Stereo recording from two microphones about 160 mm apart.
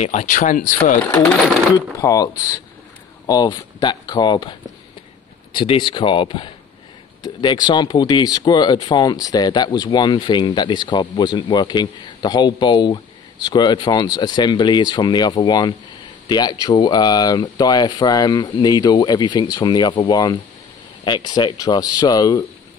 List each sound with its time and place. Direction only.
0.0 s speech: 45° left (ahead or behind)
1.8 s speech: 20° left (ahead or behind)